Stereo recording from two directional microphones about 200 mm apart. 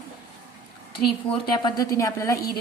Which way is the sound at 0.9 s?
25° left (ahead or behind).